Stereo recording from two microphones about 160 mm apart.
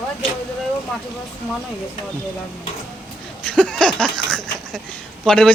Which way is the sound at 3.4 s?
5° left (ahead or behind).